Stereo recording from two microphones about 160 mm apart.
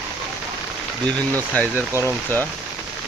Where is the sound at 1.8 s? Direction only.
15° right (ahead or behind).